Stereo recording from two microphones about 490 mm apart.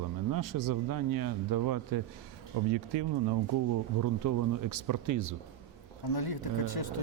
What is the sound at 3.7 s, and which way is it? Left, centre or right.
Speech, right.